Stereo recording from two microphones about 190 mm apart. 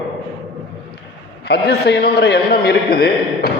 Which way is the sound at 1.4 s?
60° left (ahead or behind).